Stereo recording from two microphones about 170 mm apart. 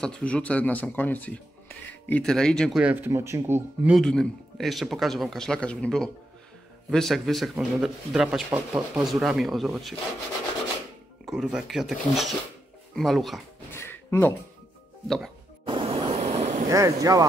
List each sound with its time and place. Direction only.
0.0 s speech: 5° left (ahead or behind)
2.8 s speech: 10° right (ahead or behind)
3.9 s a man's voice: 5° left (ahead or behind)
8.5 s speech: 15° right (ahead or behind)
8.9 s a man's voice: centre (ahead or behind)
11.2 s a man's voice: centre (ahead or behind)
13.7 s a sound: 15° left (ahead or behind)
15.0 s a man's voice: centre (ahead or behind)
15.6 s vehicle: 30° right (ahead or behind)
16.6 s speech: 20° right (ahead or behind)